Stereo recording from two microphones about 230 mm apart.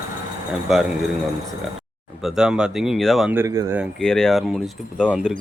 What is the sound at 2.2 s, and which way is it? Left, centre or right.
Speech, centre.